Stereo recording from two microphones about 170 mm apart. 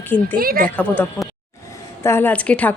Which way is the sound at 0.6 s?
10° left (ahead or behind).